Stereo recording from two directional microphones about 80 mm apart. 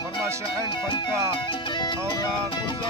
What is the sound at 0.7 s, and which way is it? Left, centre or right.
Speech, left.